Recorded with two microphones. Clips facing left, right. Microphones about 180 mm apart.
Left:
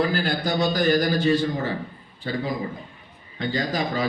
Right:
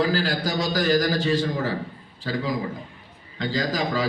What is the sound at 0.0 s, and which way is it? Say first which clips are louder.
A man's voice: even; 90° right.